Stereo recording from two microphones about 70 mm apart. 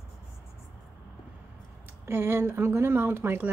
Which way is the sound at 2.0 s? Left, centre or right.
Right.